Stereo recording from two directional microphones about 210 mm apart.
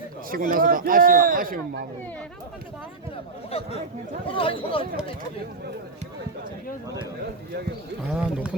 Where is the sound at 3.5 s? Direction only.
25° left (ahead or behind).